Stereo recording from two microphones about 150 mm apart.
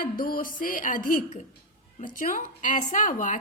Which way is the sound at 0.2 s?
75° left (ahead or behind).